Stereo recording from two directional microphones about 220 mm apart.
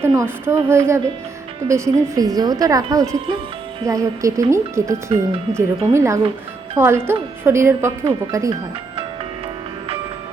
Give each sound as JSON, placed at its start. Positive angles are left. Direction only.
{"t": 0.0, "sound": "speech", "side_deg": -15}